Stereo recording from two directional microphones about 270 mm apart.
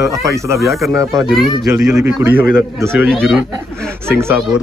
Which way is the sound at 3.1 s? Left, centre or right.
Centre.